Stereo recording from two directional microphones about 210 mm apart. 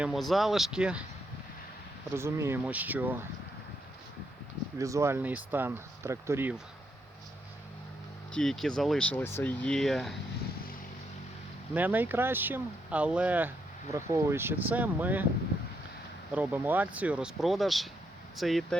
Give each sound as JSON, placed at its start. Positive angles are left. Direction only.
{"t": 0.0, "sound": "speech", "side_deg": 0}
{"t": 2.1, "sound": "speech", "side_deg": -10}
{"t": 4.8, "sound": "speech", "side_deg": -15}
{"t": 8.3, "sound": "speech", "side_deg": 0}
{"t": 11.7, "sound": "speech", "side_deg": -10}
{"t": 16.3, "sound": "speech", "side_deg": -10}